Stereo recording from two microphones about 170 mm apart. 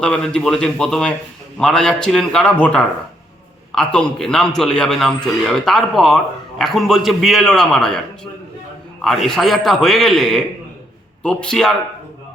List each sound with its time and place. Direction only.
0.0 s a man's voice: 5° left (ahead or behind)